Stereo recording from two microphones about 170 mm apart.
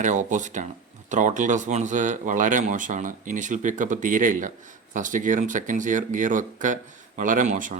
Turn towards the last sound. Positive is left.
turn(degrees=-50)  # may be behind; listen again after turning